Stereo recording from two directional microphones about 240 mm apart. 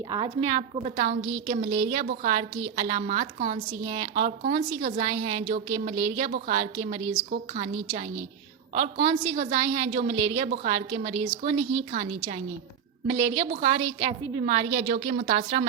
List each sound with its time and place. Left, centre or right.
0.1 s a woman's voice: right